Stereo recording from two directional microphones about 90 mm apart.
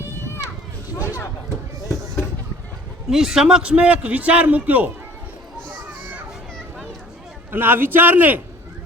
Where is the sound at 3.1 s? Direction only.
5° right (ahead or behind).